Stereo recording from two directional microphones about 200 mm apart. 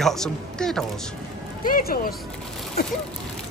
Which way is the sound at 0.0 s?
Centre (ahead or behind).